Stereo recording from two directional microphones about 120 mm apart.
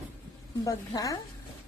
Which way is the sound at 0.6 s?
30° left (ahead or behind).